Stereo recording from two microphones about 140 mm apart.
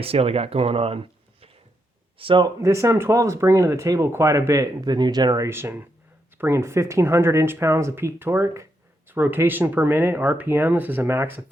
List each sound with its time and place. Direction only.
0.0 s speech: 45° right (ahead or behind)
2.6 s speech: 20° right (ahead or behind)